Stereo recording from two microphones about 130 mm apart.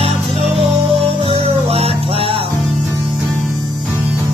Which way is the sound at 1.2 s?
50° right (ahead or behind).